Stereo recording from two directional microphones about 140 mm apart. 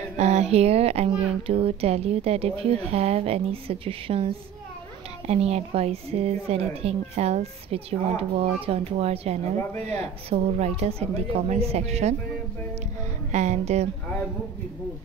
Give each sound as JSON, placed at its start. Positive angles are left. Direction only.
{"t": 0.2, "sound": "a woman's voice", "side_deg": -50}
{"t": 13.3, "sound": "music", "side_deg": -55}